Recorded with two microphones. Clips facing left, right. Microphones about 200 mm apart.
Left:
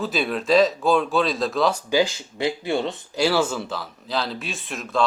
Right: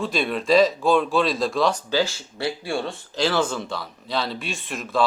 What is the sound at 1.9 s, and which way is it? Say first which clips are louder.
Speech: left 2 dB; 15° left (ahead or behind).